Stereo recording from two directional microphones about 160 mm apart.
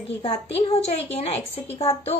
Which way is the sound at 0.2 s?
40° left (ahead or behind).